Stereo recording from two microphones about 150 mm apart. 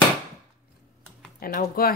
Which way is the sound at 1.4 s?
80° left.